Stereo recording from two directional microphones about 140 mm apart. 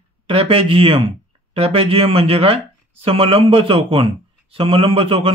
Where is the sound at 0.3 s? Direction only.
40° right (ahead or behind).